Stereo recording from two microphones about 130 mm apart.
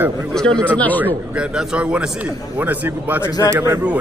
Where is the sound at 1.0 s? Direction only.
10° right (ahead or behind).